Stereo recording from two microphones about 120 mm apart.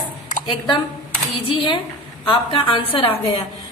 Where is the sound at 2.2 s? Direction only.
45° left (ahead or behind).